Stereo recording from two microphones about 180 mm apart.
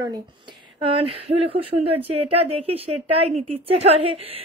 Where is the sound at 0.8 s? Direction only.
30° right (ahead or behind).